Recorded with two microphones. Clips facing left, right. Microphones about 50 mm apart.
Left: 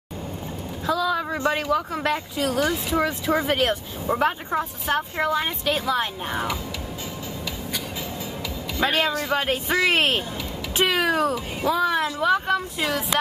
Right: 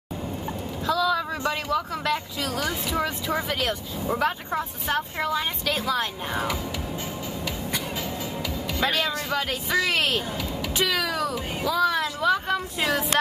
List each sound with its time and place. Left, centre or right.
0.9 s speech: left
4.1 s speech: centre
8.8 s speech: left